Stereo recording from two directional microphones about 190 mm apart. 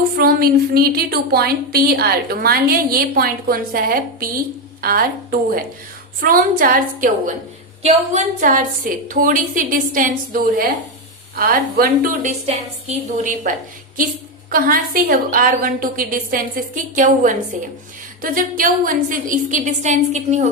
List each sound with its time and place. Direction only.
0.2 s a woman's voice: 50° right (ahead or behind)
7.8 s a woman's voice: 35° right (ahead or behind)
14.5 s a woman's voice: 50° right (ahead or behind)